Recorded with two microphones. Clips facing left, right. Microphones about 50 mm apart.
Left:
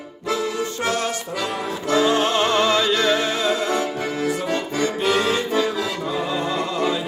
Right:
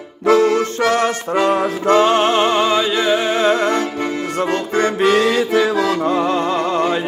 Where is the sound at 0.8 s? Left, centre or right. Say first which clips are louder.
Right 6 dB; right.